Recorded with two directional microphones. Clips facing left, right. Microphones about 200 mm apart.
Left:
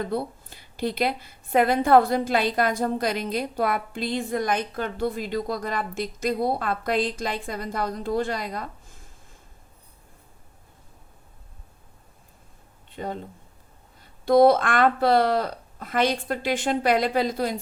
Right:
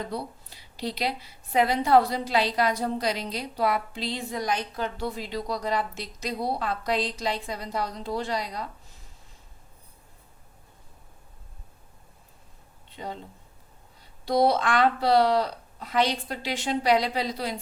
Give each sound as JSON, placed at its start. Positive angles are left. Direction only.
{"t": 0.0, "sound": "a woman's voice", "side_deg": 50}
{"t": 12.9, "sound": "a woman's voice", "side_deg": 50}